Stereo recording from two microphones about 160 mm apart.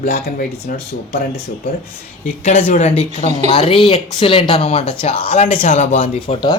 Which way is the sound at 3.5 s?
40° left (ahead or behind).